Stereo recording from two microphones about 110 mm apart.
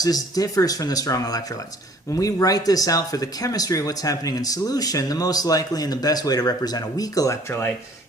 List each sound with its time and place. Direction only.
0.0 s speech: 35° left (ahead or behind)